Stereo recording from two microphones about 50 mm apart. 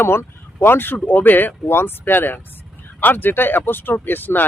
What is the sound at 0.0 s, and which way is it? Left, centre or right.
Speech, left.